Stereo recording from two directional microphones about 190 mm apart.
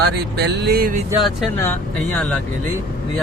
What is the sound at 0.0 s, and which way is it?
Speech, 60° right (ahead or behind).